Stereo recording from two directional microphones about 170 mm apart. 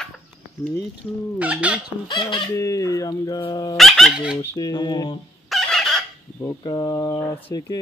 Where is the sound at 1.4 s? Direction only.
10° right (ahead or behind).